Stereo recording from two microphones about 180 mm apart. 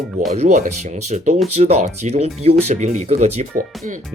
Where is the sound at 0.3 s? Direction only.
45° right (ahead or behind).